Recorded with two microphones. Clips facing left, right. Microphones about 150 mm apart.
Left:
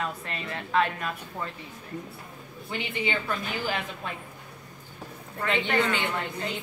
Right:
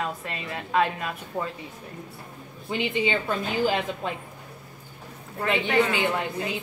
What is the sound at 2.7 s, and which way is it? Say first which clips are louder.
A woman's voice: right 5 dB; 20° right (ahead or behind).